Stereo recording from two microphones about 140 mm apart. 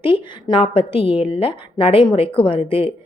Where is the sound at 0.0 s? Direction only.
40° left (ahead or behind).